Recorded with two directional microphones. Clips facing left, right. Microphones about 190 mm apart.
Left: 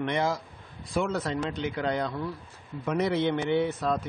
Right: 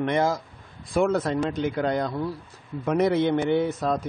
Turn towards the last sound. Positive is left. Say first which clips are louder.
# right 3 dB
turn(degrees=-45)  # may be behind; listen again after turning